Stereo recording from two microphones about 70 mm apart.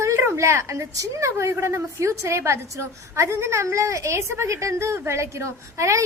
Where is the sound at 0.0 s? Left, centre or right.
Right.